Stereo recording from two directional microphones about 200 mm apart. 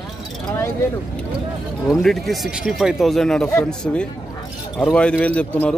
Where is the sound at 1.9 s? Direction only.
Centre (ahead or behind).